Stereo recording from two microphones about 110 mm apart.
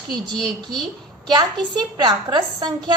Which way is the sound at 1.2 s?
40° right (ahead or behind).